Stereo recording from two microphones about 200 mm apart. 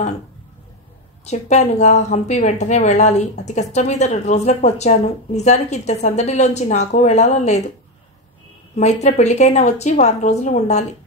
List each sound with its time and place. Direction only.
1.2 s a woman's voice: 35° left (ahead or behind)
8.7 s a woman's voice: 35° left (ahead or behind)